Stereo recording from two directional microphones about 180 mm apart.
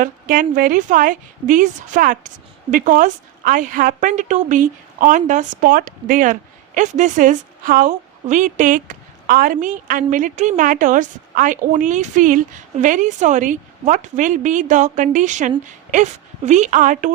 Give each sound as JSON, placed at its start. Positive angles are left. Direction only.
{"t": 0.0, "sound": "a woman's voice", "side_deg": -50}